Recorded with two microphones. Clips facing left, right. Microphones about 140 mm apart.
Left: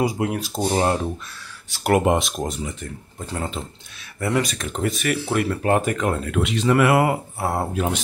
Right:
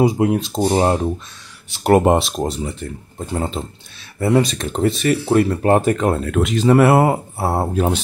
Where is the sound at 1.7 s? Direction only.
25° right (ahead or behind).